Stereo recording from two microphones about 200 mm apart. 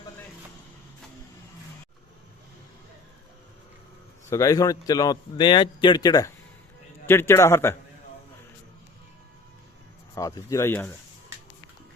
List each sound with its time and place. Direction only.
4.3 s speech: 15° left (ahead or behind)
10.2 s speech: 15° left (ahead or behind)